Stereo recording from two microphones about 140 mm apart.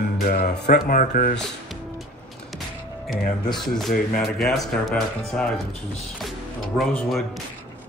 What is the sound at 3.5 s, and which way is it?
Speech, centre (ahead or behind).